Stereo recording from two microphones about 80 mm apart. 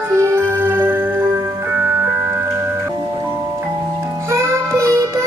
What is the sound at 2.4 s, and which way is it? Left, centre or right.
Music, right.